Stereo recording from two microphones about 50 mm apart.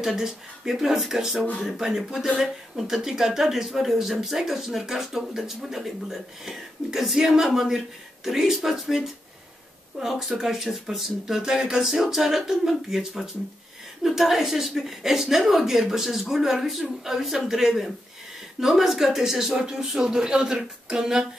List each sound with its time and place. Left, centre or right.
0.0 s a woman's voice: centre